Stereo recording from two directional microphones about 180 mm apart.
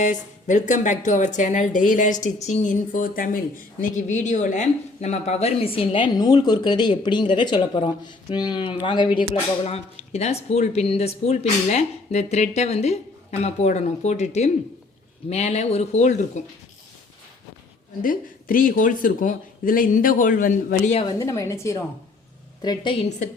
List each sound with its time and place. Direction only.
0.0 s a woman's voice: 45° left (ahead or behind)
18.0 s speech: 50° left (ahead or behind)
21.2 s a woman's voice: 20° left (ahead or behind); by 23.3 s 35° left (ahead or behind)